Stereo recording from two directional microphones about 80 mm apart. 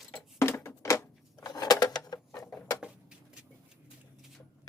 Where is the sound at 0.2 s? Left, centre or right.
Left.